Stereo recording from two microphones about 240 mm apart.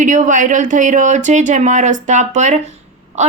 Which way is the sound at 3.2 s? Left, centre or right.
Right.